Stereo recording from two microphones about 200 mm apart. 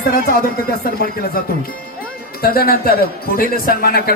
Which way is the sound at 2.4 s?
50° left (ahead or behind).